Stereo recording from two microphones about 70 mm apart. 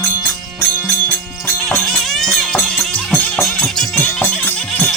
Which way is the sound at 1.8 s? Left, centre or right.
Centre.